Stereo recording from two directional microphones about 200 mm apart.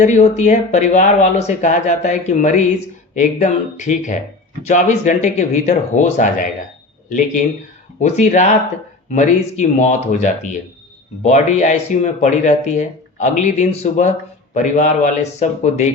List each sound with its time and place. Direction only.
0.0 s speech: 35° left (ahead or behind)